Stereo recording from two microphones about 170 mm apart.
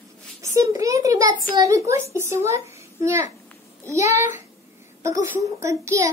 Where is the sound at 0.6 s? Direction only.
20° right (ahead or behind).